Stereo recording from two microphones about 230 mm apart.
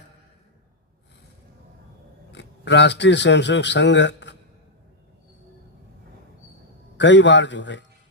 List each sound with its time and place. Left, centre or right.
2.3 s speech: left
6.9 s a man's voice: left